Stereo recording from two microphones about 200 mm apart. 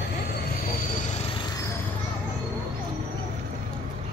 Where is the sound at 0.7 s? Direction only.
45° left (ahead or behind).